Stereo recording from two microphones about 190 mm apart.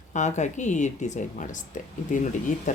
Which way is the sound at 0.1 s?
40° left (ahead or behind).